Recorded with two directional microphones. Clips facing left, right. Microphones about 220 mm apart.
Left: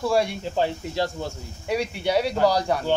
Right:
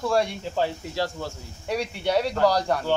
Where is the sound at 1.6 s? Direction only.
5° left (ahead or behind).